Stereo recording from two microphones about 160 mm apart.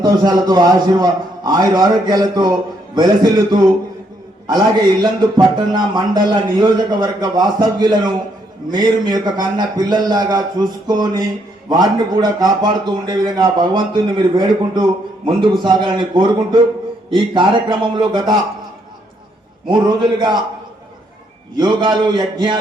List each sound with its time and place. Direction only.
0.0 s a man's voice: 25° right (ahead or behind)
5.4 s a man's voice: 25° right (ahead or behind)
19.6 s a man's voice: 30° right (ahead or behind)
21.6 s a man's voice: 30° right (ahead or behind)